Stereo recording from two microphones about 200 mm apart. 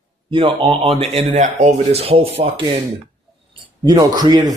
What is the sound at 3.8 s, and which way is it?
Speech, 20° right (ahead or behind).